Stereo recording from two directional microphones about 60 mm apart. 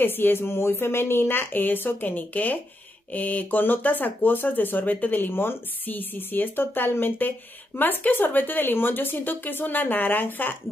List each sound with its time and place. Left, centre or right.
0.0 s speech: left